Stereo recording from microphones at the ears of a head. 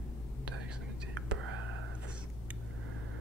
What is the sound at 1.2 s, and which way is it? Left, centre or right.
Whispering, right.